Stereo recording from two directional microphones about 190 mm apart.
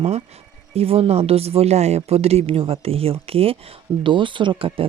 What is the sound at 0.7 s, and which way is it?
Speech, 30° right (ahead or behind).